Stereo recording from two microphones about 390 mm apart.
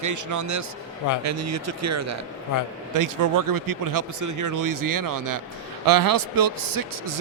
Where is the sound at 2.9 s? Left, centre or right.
Right.